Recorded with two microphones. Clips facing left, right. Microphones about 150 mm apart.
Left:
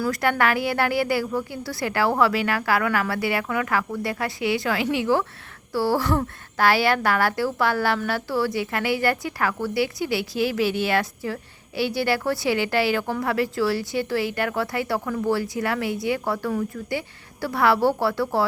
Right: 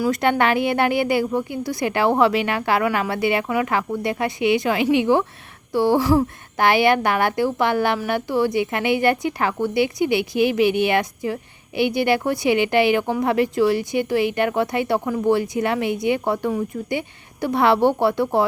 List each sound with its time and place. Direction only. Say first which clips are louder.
0.0 s a woman's voice: right 3 dB; 20° right (ahead or behind)